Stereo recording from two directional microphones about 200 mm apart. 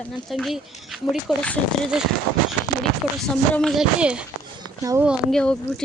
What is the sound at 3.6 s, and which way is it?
Speech, centre (ahead or behind).